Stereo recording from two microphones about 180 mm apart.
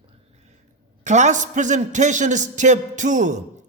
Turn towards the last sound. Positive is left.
turn(degrees=-45)  # may be behind; listen again after turning